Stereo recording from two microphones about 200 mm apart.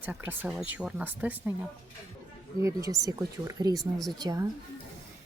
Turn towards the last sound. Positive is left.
turn(degrees=-20)  # may be behind; listen again after turning